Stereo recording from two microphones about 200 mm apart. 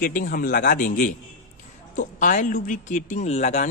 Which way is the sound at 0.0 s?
45° left (ahead or behind).